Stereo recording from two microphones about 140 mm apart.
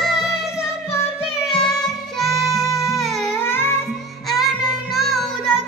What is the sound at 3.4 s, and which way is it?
Music, 15° left (ahead or behind).